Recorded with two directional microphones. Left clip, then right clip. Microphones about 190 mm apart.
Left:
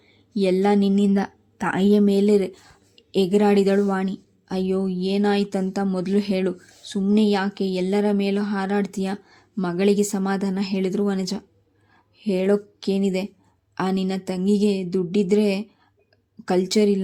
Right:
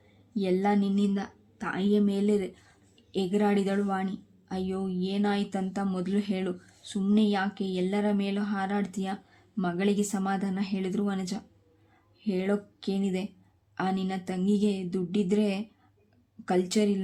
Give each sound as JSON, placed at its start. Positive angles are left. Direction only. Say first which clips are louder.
{"t": 0.3, "sound": "a woman's voice", "louder": "left 8 dB", "side_deg": 25}
{"t": 0.9, "sound": "a woman's voice", "louder": "left 9 dB", "side_deg": 35}